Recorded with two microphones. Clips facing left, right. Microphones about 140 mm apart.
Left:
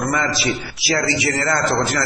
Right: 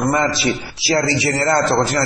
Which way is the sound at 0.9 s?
30° right (ahead or behind).